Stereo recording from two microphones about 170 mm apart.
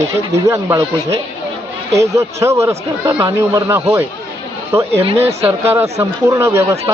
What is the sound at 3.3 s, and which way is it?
Speech, 15° right (ahead or behind).